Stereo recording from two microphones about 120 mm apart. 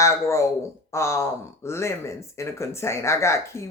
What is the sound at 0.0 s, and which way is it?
Speech, 25° left (ahead or behind).